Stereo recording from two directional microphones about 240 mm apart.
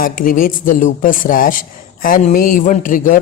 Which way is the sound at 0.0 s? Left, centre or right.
Left.